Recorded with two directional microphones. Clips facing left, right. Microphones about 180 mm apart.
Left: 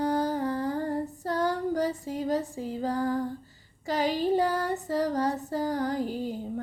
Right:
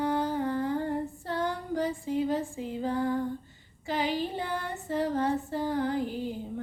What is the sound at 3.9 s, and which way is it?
Female singing, 40° left (ahead or behind).